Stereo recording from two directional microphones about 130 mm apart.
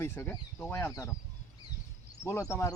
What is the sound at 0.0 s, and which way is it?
Speech, 20° left (ahead or behind).